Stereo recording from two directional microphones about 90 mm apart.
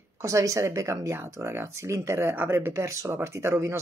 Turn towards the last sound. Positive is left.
turn(degrees=-30)  # may be behind; listen again after turning